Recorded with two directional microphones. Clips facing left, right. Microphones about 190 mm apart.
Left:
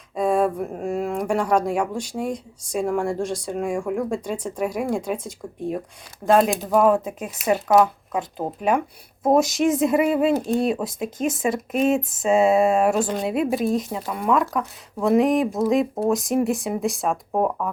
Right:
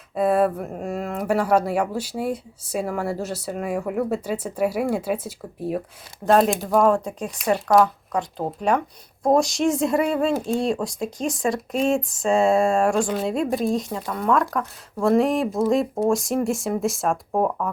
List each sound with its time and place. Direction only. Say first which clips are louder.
0.1 s speech: right 1 dB; 5° right (ahead or behind)
6.5 s speech: right 1 dB; 15° left (ahead or behind)
6.7 s speech: left 1 dB; 5° left (ahead or behind)